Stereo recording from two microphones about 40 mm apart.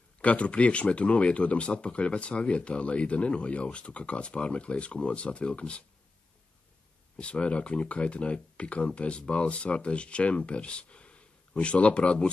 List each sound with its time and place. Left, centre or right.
0.2 s speech: left
7.2 s speech: left